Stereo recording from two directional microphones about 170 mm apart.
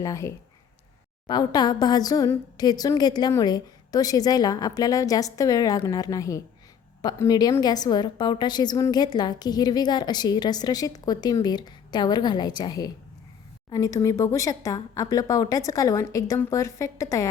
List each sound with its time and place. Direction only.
0.0 s a woman's voice: 15° left (ahead or behind)